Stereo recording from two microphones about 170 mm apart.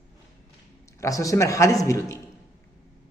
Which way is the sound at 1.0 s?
20° left (ahead or behind).